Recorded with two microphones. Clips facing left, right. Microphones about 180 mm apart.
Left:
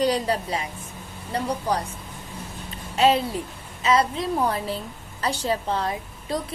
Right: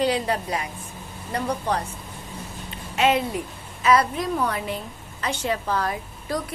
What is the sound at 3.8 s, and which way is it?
A woman's voice, 25° left (ahead or behind).